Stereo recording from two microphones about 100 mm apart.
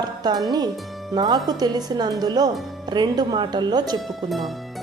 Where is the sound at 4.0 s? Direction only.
Centre (ahead or behind).